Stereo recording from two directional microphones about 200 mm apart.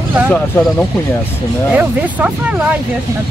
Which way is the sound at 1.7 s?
5° right (ahead or behind).